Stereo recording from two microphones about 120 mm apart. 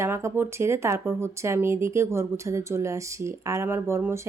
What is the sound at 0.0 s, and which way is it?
Speech, 20° right (ahead or behind).